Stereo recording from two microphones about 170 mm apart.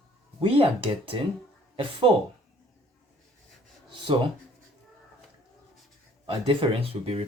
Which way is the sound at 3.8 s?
25° right (ahead or behind).